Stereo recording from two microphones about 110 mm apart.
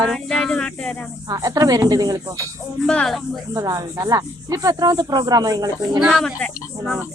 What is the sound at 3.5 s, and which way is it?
Speech, 35° right (ahead or behind).